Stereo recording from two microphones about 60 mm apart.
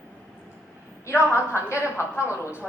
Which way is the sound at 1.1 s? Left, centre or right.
Left.